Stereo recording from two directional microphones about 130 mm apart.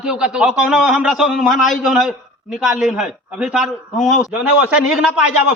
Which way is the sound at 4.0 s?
70° left (ahead or behind).